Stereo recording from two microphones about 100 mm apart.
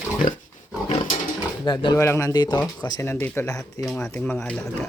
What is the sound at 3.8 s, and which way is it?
Speech, 5° left (ahead or behind).